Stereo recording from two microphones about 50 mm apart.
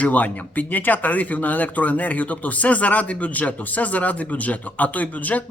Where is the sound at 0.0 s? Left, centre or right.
Left.